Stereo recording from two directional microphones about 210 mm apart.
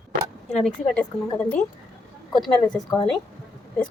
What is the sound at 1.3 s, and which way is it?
A woman's voice, 5° left (ahead or behind).